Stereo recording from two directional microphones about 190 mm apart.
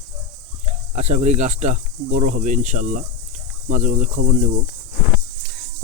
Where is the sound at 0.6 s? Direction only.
35° right (ahead or behind).